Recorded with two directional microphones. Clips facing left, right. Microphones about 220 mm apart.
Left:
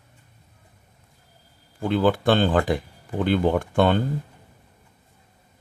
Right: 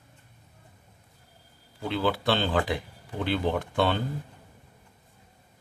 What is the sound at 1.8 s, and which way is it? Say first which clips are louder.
Speech: left 7 dB; 50° left (ahead or behind).